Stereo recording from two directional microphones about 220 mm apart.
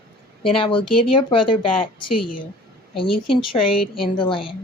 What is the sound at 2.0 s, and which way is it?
Speech, 90° left.